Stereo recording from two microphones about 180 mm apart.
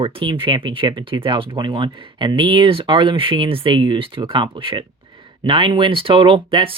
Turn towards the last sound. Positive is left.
turn(degrees=-30)  # may be behind; listen again after turning